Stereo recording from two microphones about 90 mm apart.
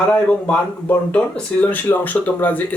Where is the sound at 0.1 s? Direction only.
15° left (ahead or behind).